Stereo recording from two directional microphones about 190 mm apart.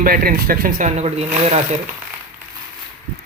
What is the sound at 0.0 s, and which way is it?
Speech, 50° right (ahead or behind).